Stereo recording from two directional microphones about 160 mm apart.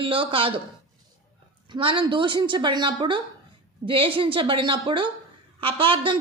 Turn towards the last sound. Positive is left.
turn(degrees=-30)  # may be behind; listen again after turning